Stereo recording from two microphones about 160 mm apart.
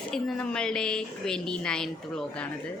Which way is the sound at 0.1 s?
5° left (ahead or behind).